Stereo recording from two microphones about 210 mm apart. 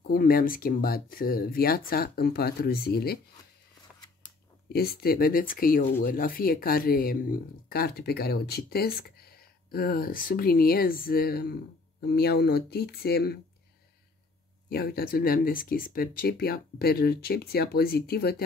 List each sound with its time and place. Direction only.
0.0 s speech: 45° left (ahead or behind)
4.7 s speech: 45° left (ahead or behind)
14.7 s speech: 45° left (ahead or behind)